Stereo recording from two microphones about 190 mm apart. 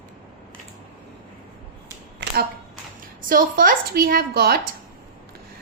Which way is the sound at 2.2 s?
65° right (ahead or behind).